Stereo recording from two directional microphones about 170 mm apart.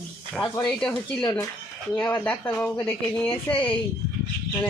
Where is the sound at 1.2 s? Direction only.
20° left (ahead or behind).